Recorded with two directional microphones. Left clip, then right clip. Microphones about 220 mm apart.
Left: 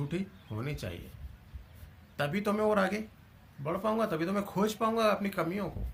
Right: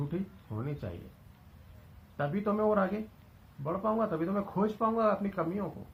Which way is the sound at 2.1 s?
10° left (ahead or behind).